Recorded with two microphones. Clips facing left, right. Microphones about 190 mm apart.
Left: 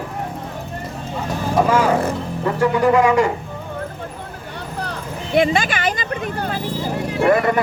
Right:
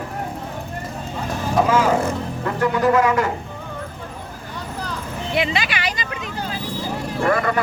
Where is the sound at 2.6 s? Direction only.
10° left (ahead or behind).